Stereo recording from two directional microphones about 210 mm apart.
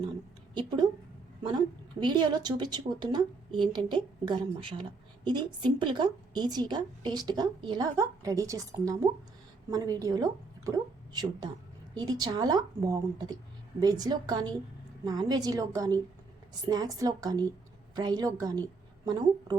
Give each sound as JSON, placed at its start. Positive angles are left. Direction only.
{"t": 1.5, "sound": "a woman's voice", "side_deg": -20}